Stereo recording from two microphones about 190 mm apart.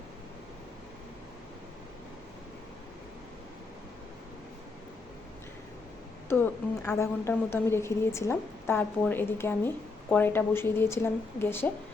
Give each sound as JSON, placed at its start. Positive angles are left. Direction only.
{"t": 6.2, "sound": "a woman's voice", "side_deg": 10}